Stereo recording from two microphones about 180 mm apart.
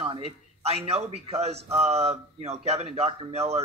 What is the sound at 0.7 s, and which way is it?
Speech, 35° right (ahead or behind).